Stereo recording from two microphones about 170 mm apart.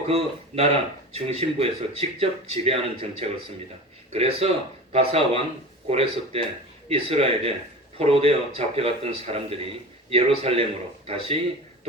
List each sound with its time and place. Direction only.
0.1 s speech: 35° right (ahead or behind)